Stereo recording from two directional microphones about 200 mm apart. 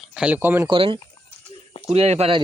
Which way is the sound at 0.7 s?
25° right (ahead or behind).